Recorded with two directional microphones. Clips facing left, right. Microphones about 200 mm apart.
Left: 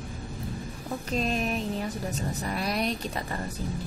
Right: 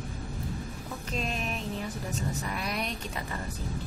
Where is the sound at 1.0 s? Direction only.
40° left (ahead or behind).